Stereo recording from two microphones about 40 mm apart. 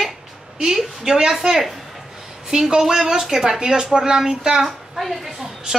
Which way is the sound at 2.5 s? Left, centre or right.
Centre.